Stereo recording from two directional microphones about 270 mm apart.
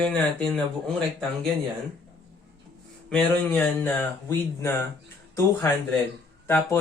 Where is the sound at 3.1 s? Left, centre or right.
Centre.